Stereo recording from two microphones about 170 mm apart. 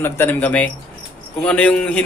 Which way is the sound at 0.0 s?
10° left (ahead or behind).